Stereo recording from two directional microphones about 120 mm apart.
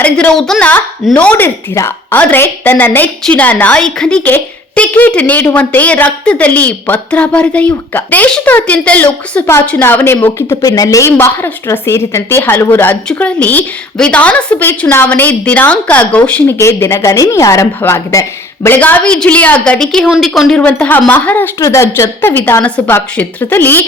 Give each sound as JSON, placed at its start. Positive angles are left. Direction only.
{"t": 0.0, "sound": "a woman's voice", "side_deg": 10}
{"t": 16.6, "sound": "a woman's voice", "side_deg": 25}